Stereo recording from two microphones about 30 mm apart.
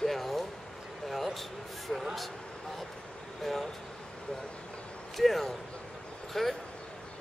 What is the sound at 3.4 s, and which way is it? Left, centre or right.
Speech, centre.